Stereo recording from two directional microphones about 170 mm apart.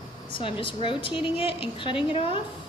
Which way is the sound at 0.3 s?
30° left (ahead or behind).